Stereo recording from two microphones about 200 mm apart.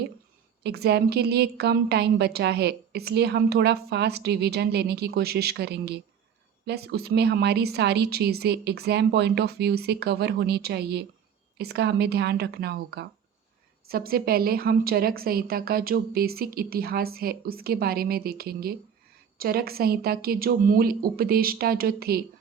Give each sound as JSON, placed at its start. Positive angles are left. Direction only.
{"t": 0.6, "sound": "a woman's voice", "side_deg": -55}